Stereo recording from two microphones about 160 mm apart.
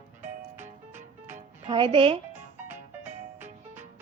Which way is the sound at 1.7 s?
30° right (ahead or behind).